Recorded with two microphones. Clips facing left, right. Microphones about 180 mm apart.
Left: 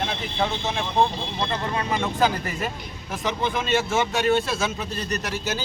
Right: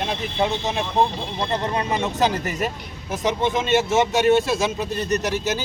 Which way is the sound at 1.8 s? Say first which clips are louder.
Right 2 dB; 20° right (ahead or behind).